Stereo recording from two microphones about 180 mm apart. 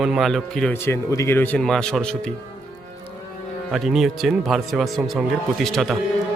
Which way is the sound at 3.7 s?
Centre (ahead or behind).